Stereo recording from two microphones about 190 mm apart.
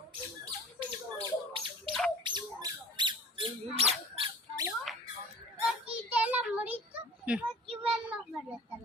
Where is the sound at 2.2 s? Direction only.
25° right (ahead or behind).